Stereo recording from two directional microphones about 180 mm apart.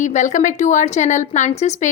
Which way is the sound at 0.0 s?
40° left (ahead or behind).